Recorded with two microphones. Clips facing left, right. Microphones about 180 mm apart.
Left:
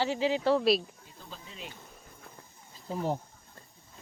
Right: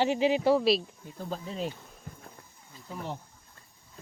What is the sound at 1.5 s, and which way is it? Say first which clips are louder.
Speech: right 12 dB; 35° right (ahead or behind).